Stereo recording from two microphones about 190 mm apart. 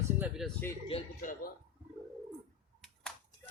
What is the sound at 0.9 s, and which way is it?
Speech, 30° left (ahead or behind).